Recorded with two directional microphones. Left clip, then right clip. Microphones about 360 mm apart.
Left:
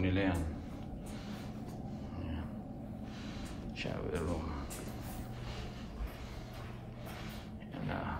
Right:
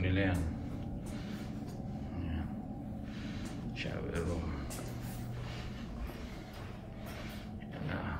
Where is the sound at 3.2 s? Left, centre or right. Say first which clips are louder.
Right 3 dB; centre.